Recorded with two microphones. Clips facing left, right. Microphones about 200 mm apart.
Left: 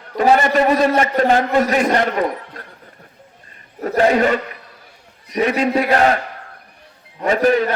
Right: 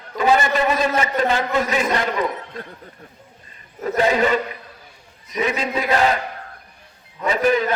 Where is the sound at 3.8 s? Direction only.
45° left (ahead or behind).